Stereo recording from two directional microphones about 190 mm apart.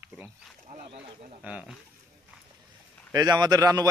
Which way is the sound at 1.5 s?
5° right (ahead or behind).